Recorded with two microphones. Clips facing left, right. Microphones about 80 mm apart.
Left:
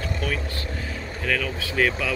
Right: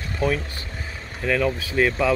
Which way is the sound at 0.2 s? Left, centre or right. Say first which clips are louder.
Right 5 dB; right.